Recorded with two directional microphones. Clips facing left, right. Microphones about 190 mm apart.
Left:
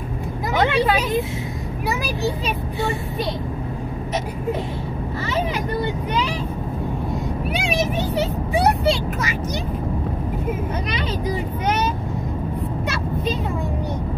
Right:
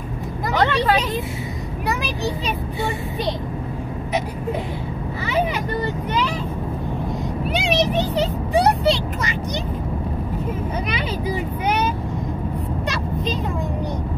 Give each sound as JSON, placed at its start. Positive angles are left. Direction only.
{"t": 0.7, "sound": "speech", "side_deg": 15}
{"t": 7.6, "sound": "a child's voice", "side_deg": 5}
{"t": 10.9, "sound": "speech", "side_deg": -10}